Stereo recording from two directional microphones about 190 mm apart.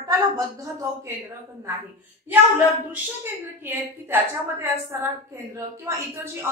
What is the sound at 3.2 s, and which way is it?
A woman's voice, 10° right (ahead or behind).